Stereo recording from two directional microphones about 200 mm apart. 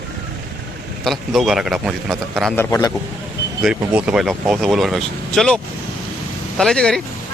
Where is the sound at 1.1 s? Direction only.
Centre (ahead or behind).